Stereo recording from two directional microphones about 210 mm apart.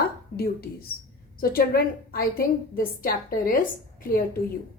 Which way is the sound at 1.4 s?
45° left (ahead or behind).